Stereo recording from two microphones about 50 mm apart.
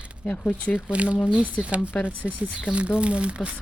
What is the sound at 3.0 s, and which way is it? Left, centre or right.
Speech, right.